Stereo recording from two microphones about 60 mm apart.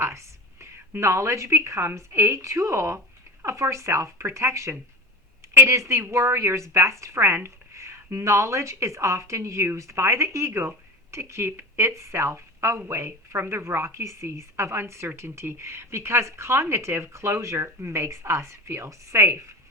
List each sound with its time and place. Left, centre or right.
0.0 s a sound: right
2.0 s a woman's voice: right
11.9 s a woman's voice: right